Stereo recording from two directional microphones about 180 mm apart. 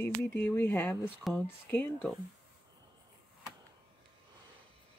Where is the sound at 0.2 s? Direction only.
10° left (ahead or behind).